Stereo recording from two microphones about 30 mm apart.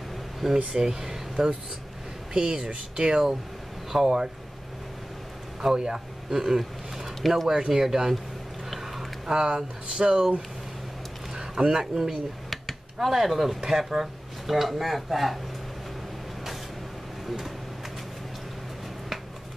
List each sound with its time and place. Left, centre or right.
0.4 s speech: centre
0.7 s speech: centre
3.9 s speech: centre
5.8 s speech: right
7.2 s speech: centre
7.4 s speech: centre
8.6 s a sound: centre
9.4 s speech: right
11.3 s a sound: right
11.9 s speech: right
12.4 s a sound: centre
13.6 s speech: centre
14.5 s speech: centre